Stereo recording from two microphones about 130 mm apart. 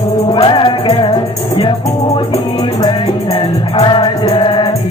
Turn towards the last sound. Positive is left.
turn(degrees=40)  # may be behind; listen again after turning